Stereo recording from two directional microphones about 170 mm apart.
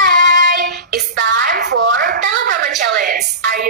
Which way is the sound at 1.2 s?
90° right.